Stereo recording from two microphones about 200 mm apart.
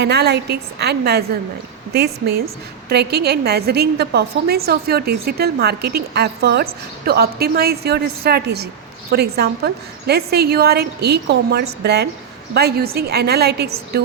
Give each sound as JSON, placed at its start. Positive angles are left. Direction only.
{"t": 0.0, "sound": "a woman's voice", "side_deg": -55}